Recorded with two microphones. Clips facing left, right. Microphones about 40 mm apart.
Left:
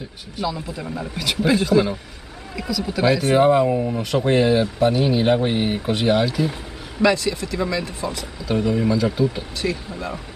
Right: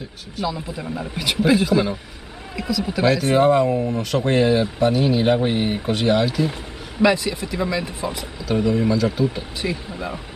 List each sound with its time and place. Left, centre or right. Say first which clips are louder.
0.4 s speech: even; centre
3.1 s speech: left 1 dB; centre
7.0 s speech: even; centre
8.6 s speech: right 1 dB; centre
9.6 s speech: left 1 dB; centre